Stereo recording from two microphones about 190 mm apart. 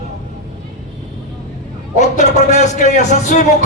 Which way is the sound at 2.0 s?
40° left (ahead or behind).